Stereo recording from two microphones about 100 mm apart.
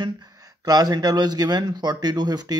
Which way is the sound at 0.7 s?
40° right (ahead or behind).